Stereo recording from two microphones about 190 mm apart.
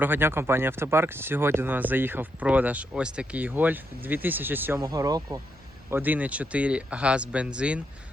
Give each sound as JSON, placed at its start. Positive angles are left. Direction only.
{"t": 0.0, "sound": "speech", "side_deg": -10}